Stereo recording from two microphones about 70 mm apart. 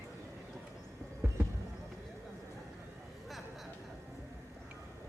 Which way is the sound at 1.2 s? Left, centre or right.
Right.